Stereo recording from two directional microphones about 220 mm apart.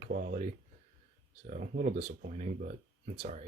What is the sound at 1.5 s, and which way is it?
Speech, 35° right (ahead or behind).